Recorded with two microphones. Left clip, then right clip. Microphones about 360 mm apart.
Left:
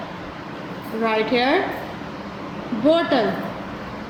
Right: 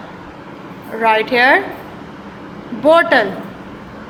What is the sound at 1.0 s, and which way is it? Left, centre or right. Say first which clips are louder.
Speech: right 8 dB; right.